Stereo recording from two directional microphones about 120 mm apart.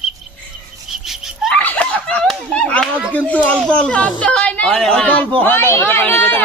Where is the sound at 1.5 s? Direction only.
10° left (ahead or behind).